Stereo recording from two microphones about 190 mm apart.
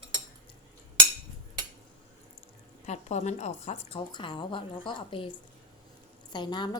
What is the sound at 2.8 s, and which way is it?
A woman's voice, 35° left (ahead or behind).